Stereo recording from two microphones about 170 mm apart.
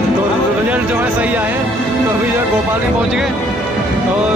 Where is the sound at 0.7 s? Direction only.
10° right (ahead or behind).